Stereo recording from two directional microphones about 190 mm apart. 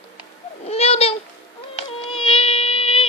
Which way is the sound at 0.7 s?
30° left (ahead or behind).